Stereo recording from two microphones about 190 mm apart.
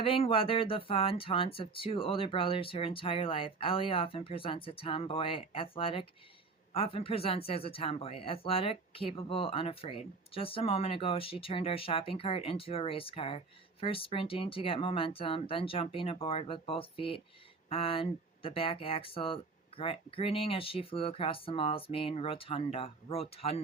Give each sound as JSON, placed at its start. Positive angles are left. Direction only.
{"t": 0.0, "sound": "speech", "side_deg": 30}